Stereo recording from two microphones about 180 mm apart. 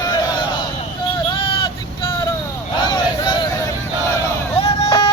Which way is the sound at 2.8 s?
25° left (ahead or behind).